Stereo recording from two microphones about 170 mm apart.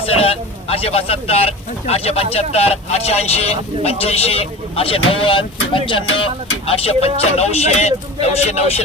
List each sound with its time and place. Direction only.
0.0 s speech: 35° left (ahead or behind)